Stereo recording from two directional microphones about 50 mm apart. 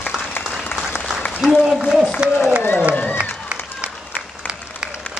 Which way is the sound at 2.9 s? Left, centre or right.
Left.